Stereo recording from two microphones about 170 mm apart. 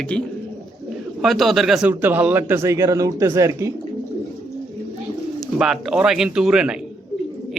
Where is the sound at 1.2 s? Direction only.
Centre (ahead or behind); by 3.7 s 15° right (ahead or behind).